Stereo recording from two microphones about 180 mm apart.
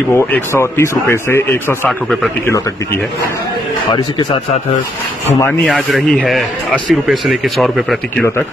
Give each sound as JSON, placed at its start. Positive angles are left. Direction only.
{"t": 0.1, "sound": "speech", "side_deg": 15}
{"t": 3.9, "sound": "speech", "side_deg": 25}
{"t": 5.3, "sound": "speech", "side_deg": 10}